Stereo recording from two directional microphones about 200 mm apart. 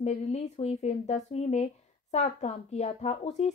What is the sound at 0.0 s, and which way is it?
Speech, 35° left (ahead or behind).